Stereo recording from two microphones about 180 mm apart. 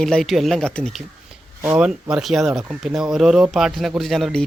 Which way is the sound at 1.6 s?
10° right (ahead or behind).